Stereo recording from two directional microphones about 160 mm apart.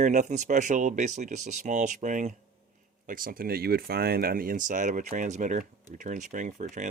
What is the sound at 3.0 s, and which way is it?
Speech, 60° right (ahead or behind).